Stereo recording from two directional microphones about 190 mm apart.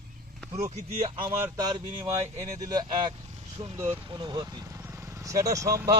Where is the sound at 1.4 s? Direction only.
15° right (ahead or behind).